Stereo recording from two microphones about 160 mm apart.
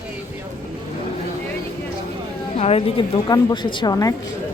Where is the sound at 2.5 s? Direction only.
40° left (ahead or behind); by 4.2 s 20° left (ahead or behind).